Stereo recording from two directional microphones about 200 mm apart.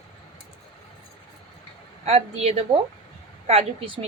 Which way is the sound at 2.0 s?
30° right (ahead or behind).